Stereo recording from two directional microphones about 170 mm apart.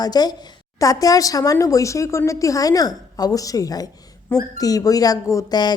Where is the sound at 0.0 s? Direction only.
25° left (ahead or behind).